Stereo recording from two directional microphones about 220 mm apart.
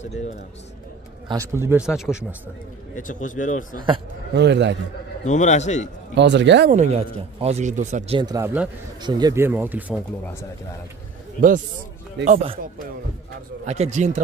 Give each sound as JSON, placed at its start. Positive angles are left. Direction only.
{"t": 1.3, "sound": "speech", "side_deg": -15}
{"t": 3.0, "sound": "a man's voice", "side_deg": 35}
{"t": 3.7, "sound": "speech", "side_deg": -20}
{"t": 4.3, "sound": "speech", "side_deg": -50}
{"t": 5.2, "sound": "a man's voice", "side_deg": 30}
{"t": 6.1, "sound": "speech", "side_deg": -55}
{"t": 6.7, "sound": "speech", "side_deg": -30}
{"t": 8.2, "sound": "speech", "side_deg": -15}
{"t": 12.3, "sound": "speech", "side_deg": -30}
{"t": 13.7, "sound": "speech", "side_deg": -30}